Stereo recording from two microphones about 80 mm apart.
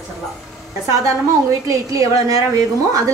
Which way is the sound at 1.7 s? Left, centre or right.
Right.